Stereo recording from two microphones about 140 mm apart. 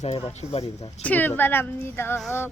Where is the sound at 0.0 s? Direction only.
45° left (ahead or behind).